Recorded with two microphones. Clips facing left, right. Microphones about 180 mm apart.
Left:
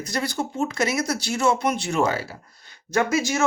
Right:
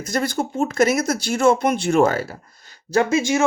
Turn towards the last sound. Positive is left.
turn(degrees=-35)  # may be behind; listen again after turning